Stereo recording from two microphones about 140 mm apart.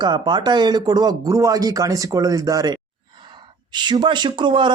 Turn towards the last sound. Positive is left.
turn(degrees=-35)  # may be behind; listen again after turning